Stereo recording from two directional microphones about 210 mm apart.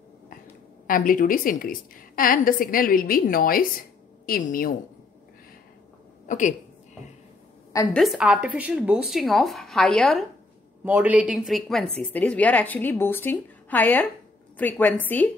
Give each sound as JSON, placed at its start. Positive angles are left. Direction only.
{"t": 0.8, "sound": "a woman's voice", "side_deg": 40}
{"t": 6.2, "sound": "a woman's voice", "side_deg": 35}
{"t": 7.7, "sound": "a woman's voice", "side_deg": 5}